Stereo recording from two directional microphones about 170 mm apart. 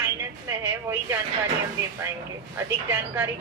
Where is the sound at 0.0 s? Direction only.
15° right (ahead or behind).